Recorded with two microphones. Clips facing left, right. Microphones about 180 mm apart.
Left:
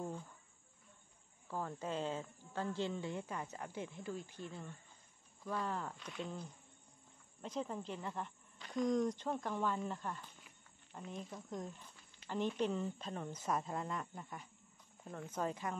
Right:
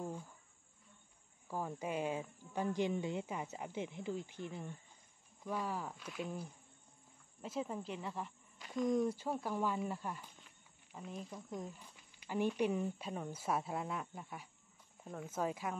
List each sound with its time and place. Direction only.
1.5 s speech: 10° right (ahead or behind)